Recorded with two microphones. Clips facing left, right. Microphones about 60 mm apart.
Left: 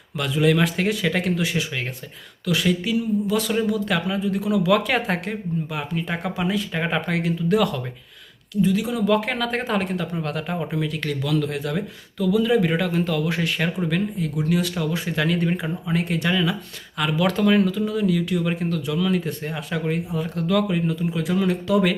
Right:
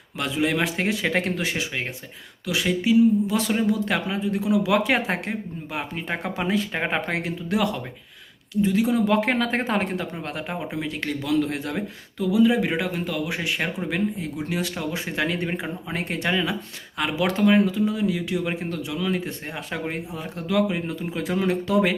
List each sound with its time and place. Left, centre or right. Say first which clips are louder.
0.2 s speech: left 4 dB; right
12.9 s speech: left 4 dB; centre
13.4 s speech: left 3 dB; centre
20.9 s speech: left 3 dB; right